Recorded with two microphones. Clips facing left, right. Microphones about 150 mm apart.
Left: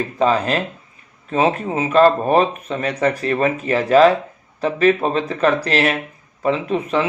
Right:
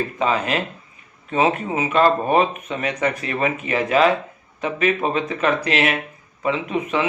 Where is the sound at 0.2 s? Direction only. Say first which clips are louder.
Left 5 dB; 35° left (ahead or behind).